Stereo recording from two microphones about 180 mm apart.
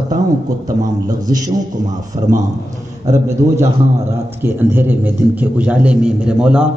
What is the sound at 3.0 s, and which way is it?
Speech, 40° right (ahead or behind).